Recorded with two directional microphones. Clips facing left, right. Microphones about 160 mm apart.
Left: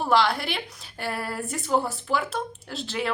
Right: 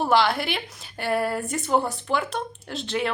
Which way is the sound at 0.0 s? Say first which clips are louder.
Right 1 dB; centre (ahead or behind).